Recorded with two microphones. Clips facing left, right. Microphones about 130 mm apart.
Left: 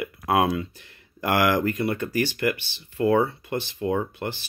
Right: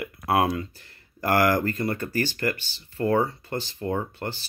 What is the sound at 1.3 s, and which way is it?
Speech, 40° right (ahead or behind).